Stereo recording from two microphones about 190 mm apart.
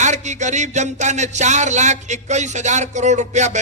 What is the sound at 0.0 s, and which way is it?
A man's voice, 40° right (ahead or behind).